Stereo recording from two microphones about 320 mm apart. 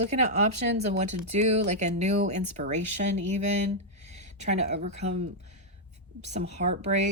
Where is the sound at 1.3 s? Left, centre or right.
Right.